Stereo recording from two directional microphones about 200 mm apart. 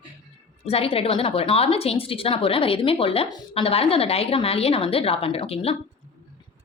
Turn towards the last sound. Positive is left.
turn(degrees=30)  # may be behind; listen again after turning